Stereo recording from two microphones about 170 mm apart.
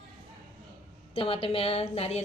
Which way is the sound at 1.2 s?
35° left (ahead or behind).